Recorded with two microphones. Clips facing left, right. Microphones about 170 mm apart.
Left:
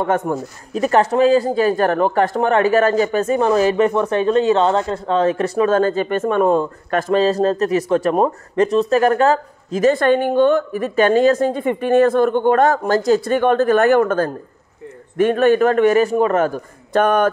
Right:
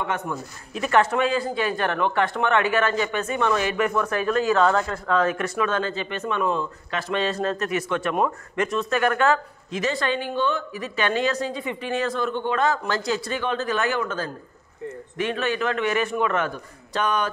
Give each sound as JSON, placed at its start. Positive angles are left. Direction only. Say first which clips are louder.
{"t": 0.0, "sound": "a man's voice", "louder": "left 9 dB", "side_deg": 45}